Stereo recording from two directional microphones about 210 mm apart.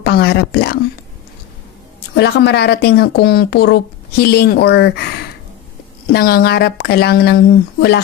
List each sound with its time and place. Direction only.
0.0 s speech: 50° left (ahead or behind)
2.1 s speech: 55° left (ahead or behind)
6.1 s speech: 45° left (ahead or behind)